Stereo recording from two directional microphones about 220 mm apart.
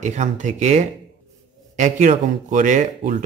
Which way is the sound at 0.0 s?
35° right (ahead or behind).